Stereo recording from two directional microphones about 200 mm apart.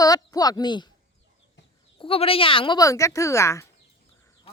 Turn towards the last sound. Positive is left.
turn(degrees=15)  # may be behind; listen again after turning